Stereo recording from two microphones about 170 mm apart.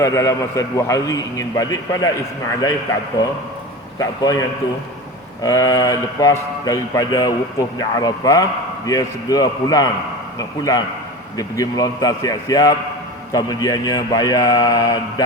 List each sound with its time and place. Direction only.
0.0 s a man's voice: 20° left (ahead or behind)
3.9 s a man's voice: 20° left (ahead or behind)